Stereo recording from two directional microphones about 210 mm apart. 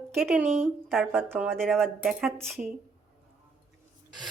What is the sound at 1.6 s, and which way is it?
Speech, centre (ahead or behind).